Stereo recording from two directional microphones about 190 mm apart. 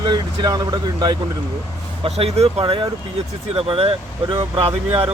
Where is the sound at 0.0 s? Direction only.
20° right (ahead or behind).